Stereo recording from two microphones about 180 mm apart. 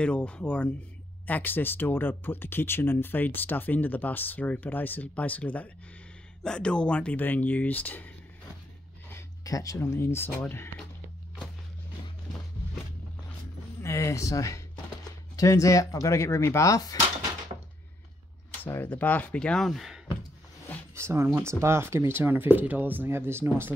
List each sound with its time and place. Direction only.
0.0 s speech: 5° left (ahead or behind)
9.1 s speech: 20° left (ahead or behind)
13.7 s speech: 15° left (ahead or behind)
18.6 s speech: 10° left (ahead or behind)
20.9 s speech: 15° right (ahead or behind)